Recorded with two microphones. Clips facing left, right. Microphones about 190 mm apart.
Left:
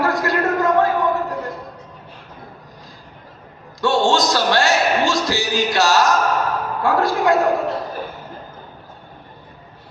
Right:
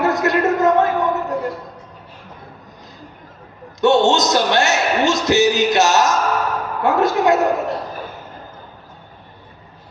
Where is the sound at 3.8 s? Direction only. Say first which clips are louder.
Right 3 dB; 20° right (ahead or behind).